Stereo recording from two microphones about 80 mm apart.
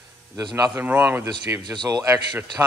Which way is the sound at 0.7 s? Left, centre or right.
Right.